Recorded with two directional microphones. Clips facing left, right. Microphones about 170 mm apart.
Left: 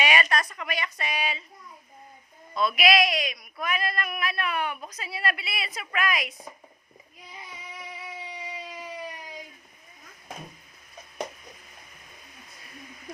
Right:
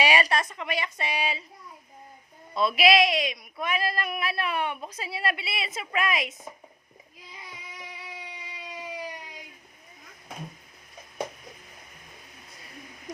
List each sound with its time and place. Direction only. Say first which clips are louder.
0.0 s a woman's voice: right 1 dB; 30° right (ahead or behind)
2.6 s a woman's voice: right 2 dB; 30° right (ahead or behind)